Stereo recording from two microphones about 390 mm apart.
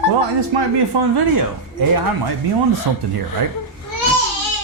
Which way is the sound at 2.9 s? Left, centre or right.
Right.